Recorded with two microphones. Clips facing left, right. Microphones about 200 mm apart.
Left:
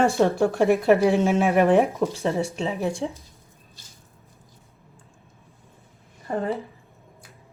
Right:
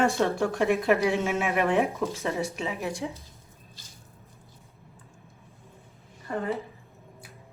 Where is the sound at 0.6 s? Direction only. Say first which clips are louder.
Left 5 dB; 35° left (ahead or behind).